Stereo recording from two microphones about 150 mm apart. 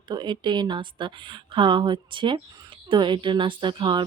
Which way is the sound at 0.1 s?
30° right (ahead or behind).